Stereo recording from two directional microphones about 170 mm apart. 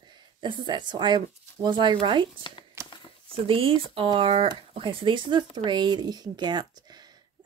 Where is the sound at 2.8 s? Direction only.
20° right (ahead or behind).